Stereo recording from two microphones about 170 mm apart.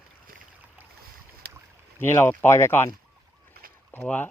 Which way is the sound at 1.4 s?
65° right (ahead or behind).